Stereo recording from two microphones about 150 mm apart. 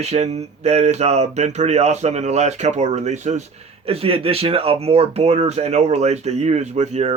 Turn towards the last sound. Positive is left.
turn(degrees=-50)  # may be behind; listen again after turning